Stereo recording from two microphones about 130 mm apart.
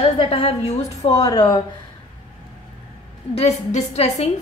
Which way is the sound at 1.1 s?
30° left (ahead or behind).